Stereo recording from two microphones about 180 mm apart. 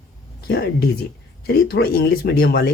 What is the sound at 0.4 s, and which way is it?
A woman's voice, 60° left (ahead or behind).